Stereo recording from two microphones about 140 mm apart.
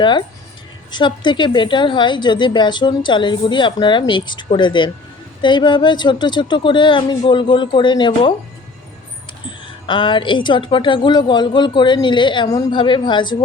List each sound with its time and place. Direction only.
0.0 s a woman's voice: 35° left (ahead or behind)
9.5 s a woman's voice: 35° left (ahead or behind)